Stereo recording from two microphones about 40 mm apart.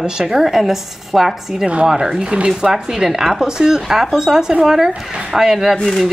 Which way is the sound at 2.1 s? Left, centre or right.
Right.